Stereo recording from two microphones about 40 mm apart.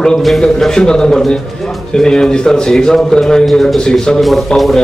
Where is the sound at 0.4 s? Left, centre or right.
Centre.